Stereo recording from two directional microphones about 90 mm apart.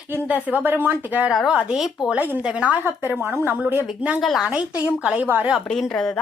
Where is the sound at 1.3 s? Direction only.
5° right (ahead or behind).